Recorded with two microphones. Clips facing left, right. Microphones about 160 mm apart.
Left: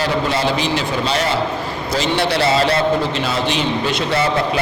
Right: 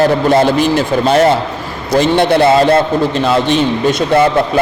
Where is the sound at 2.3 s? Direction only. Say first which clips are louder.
Right 8 dB; 50° right (ahead or behind).